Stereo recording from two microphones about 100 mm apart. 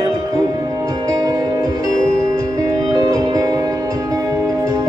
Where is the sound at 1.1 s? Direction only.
35° right (ahead or behind).